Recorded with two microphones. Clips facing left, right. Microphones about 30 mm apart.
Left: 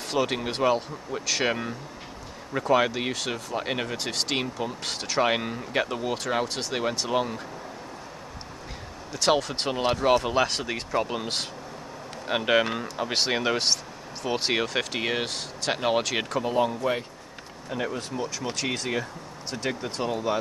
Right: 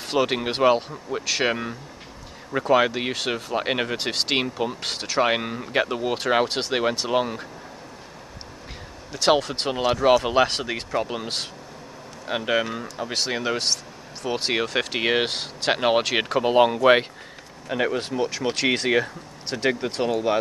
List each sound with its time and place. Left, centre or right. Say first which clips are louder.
0.1 s speech: right 4 dB; right
1.2 s speech: right 2 dB; centre; by 6.8 s right
6.8 s speech: right 2 dB; right
9.1 s speech: right 3 dB; centre
10.2 s speech: right 4 dB; centre
12.3 s speech: left 1 dB; centre; by 16.4 s right
16.4 s speech: right 10 dB; right
19.5 s speech: right 6 dB; right